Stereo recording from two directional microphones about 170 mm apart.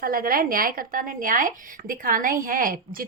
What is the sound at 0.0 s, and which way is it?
Speech, 60° right (ahead or behind).